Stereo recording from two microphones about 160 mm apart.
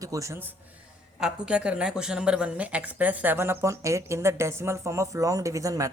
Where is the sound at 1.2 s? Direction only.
5° right (ahead or behind).